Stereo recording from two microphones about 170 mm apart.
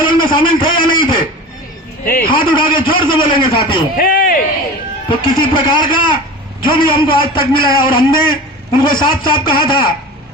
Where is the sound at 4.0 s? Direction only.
55° left (ahead or behind).